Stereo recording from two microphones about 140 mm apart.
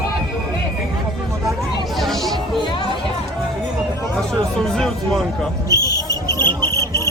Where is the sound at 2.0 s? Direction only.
Centre (ahead or behind).